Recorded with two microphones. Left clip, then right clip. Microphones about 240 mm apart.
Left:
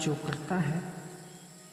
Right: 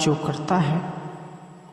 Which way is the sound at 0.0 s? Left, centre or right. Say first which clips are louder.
Right 10 dB; right.